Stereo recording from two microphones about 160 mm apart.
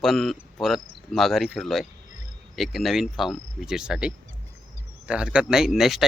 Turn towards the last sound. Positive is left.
turn(degrees=0)  # may be behind; listen again after turning